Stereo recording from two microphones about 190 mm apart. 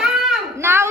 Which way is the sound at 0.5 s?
15° right (ahead or behind).